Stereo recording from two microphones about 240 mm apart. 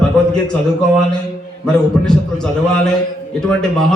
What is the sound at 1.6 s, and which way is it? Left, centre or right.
A man's voice, centre.